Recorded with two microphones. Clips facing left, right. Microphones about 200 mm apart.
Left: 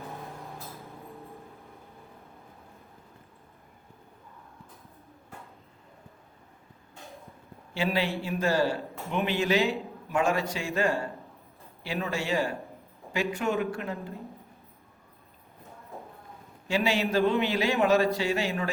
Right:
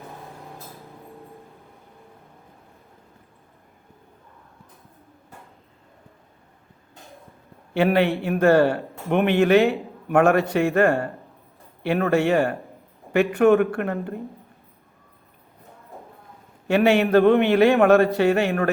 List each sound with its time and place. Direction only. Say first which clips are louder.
0.7 s music: right 1 dB; centre (ahead or behind)
7.7 s a man's voice: right 9 dB; 60° right (ahead or behind)
16.6 s a man's voice: right 9 dB; 60° right (ahead or behind)